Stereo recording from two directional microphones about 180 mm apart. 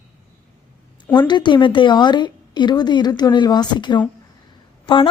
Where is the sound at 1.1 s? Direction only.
25° left (ahead or behind).